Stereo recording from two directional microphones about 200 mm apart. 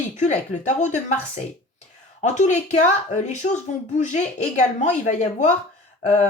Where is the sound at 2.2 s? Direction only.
35° left (ahead or behind).